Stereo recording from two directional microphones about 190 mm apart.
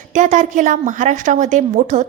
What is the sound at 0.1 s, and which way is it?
A woman's voice, 40° right (ahead or behind).